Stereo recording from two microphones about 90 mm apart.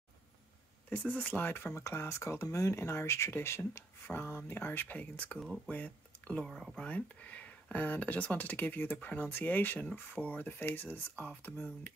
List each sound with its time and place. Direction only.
0.8 s speech: 20° left (ahead or behind)